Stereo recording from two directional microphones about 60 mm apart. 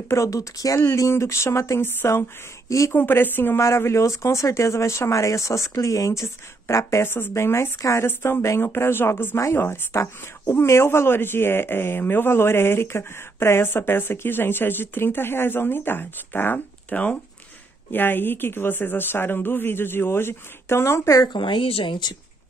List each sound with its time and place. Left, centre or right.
0.1 s speech: left
0.9 s speech: left
3.5 s speech: left
6.2 s speech: left
8.1 s speech: left
16.9 s speech: left
17.9 s speech: left